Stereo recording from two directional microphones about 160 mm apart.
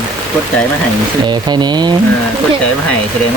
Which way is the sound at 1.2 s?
25° right (ahead or behind).